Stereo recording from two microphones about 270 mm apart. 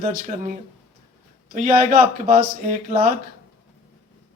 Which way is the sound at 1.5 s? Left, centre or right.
Right.